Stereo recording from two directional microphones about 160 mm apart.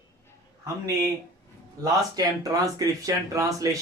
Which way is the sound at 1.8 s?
25° right (ahead or behind).